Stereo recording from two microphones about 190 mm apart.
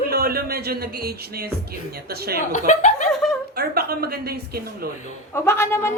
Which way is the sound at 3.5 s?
55° right (ahead or behind).